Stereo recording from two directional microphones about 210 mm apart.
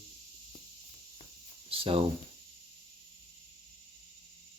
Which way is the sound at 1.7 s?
25° right (ahead or behind).